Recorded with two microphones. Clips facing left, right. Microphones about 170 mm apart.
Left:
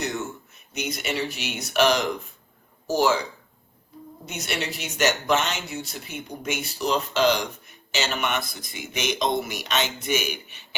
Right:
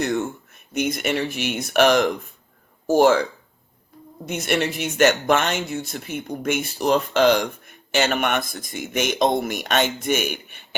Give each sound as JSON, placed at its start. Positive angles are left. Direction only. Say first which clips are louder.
{"t": 0.0, "sound": "speech", "louder": "right 6 dB", "side_deg": -55}
{"t": 4.3, "sound": "speech", "louder": "right 8 dB", "side_deg": -55}